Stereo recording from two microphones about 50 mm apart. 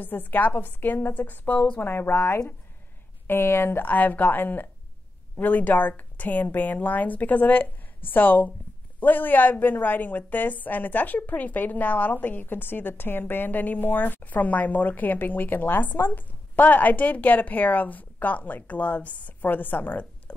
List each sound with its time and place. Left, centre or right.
0.0 s a woman's voice: left
1.8 s speech: left
3.3 s speech: left
3.8 s a woman's voice: left